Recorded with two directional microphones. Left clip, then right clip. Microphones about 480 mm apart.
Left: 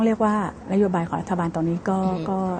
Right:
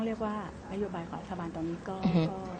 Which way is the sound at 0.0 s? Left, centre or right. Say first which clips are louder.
Left 13 dB; left.